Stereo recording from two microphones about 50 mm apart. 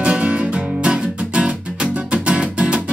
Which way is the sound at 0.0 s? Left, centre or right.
Right.